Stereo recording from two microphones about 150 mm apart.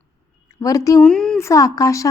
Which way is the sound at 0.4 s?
20° left (ahead or behind).